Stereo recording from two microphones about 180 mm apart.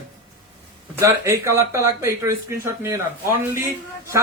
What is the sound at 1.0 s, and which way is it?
Speech, 15° right (ahead or behind).